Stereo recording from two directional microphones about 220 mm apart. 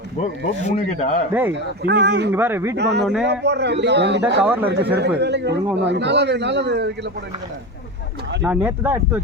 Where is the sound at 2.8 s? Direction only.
50° right (ahead or behind).